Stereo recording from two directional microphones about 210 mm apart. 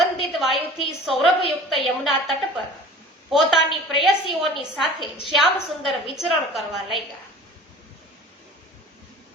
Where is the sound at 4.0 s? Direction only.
Centre (ahead or behind).